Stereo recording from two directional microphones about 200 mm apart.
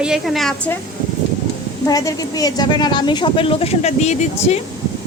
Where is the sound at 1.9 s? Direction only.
20° left (ahead or behind); by 4.5 s 35° left (ahead or behind).